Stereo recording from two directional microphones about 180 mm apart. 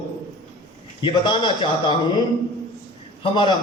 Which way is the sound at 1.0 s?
25° left (ahead or behind).